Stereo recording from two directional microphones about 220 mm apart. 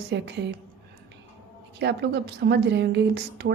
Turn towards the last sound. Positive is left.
turn(degrees=-50)  # may be behind; listen again after turning